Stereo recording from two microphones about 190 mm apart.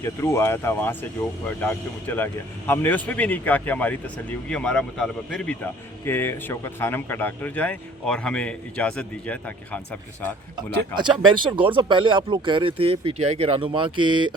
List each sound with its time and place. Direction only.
0.0 s speech: 15° left (ahead or behind)
10.9 s speech: 25° right (ahead or behind)